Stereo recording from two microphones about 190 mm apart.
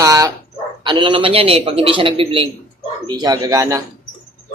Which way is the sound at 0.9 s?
25° right (ahead or behind).